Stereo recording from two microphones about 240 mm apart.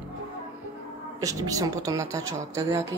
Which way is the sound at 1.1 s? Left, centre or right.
Centre.